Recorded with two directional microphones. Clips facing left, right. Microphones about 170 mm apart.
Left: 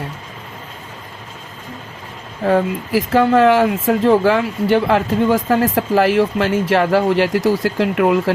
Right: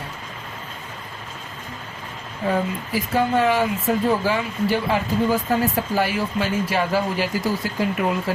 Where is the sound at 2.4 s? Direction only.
75° left (ahead or behind).